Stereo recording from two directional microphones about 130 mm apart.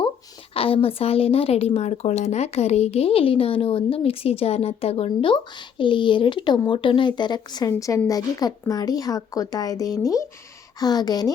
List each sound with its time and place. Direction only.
0.5 s a woman's voice: 45° left (ahead or behind)